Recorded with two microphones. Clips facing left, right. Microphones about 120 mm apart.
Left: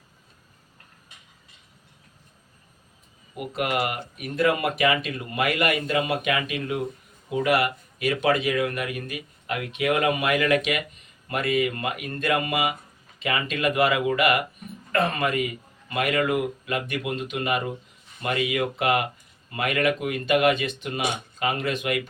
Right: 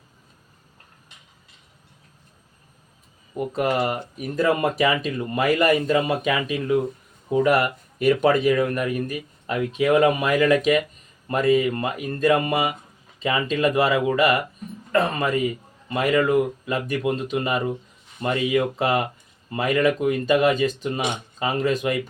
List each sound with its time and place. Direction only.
3.3 s speech: 35° right (ahead or behind)